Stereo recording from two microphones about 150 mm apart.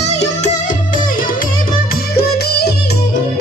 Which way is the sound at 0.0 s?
45° left (ahead or behind).